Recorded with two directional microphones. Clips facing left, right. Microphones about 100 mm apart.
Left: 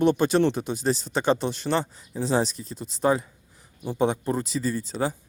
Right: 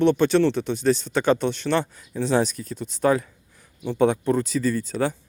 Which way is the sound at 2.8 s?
Centre (ahead or behind).